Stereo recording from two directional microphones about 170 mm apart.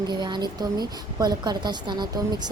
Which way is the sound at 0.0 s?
25° right (ahead or behind).